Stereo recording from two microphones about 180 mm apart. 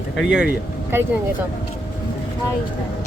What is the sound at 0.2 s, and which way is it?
Speech, 5° right (ahead or behind).